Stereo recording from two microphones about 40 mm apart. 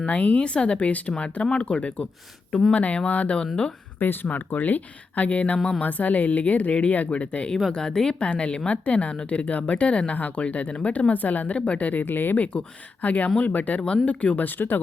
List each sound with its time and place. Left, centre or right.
0.1 s a woman's voice: left
1.1 s a woman's voice: left
3.4 s speech: centre
4.0 s a woman's voice: left
7.7 s a woman's voice: centre; by 12.0 s left
12.0 s speech: left
12.4 s a woman's voice: left
13.8 s a woman's voice: left